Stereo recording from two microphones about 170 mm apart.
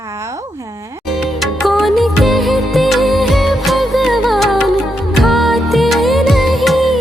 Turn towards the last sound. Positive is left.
turn(degrees=0)  # may be behind; listen again after turning